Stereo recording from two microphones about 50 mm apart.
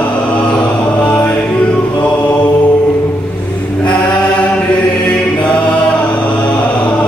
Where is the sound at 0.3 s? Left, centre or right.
Left.